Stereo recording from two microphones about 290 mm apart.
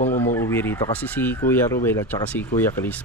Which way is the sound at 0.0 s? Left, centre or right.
Centre.